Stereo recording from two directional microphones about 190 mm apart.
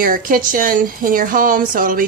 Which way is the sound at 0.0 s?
45° right (ahead or behind).